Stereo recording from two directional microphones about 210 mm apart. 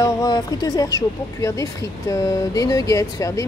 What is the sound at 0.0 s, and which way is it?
Speech, 15° left (ahead or behind).